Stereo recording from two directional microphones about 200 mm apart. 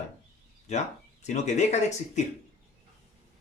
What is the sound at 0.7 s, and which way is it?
Speech, 35° left (ahead or behind).